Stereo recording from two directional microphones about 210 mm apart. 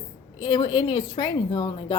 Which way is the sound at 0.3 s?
20° left (ahead or behind).